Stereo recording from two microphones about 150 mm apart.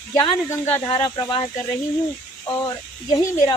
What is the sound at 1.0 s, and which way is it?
Speech, 30° left (ahead or behind).